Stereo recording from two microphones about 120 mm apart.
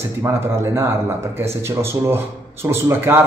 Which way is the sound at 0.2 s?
30° right (ahead or behind).